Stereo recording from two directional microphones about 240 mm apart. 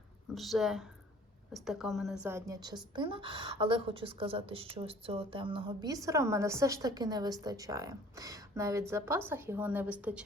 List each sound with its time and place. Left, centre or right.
0.3 s speech: centre